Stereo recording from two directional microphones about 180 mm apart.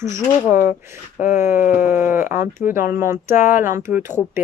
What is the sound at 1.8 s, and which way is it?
Speech, 10° right (ahead or behind).